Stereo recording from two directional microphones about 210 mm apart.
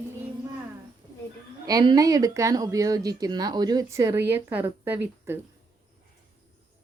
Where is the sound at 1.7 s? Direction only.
15° right (ahead or behind).